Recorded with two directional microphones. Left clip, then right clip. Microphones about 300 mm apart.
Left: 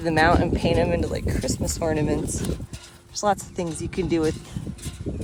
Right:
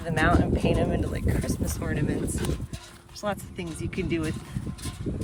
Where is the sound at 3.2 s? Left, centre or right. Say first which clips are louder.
Left 8 dB; centre.